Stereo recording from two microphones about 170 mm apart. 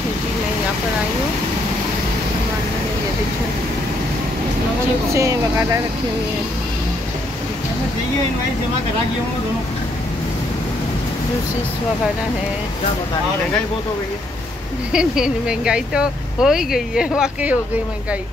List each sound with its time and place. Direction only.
5.1 s speech: 15° right (ahead or behind)
14.9 s speech: 5° right (ahead or behind)